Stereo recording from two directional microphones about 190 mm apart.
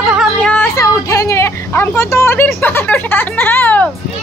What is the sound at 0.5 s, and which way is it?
A woman's voice, 15° left (ahead or behind).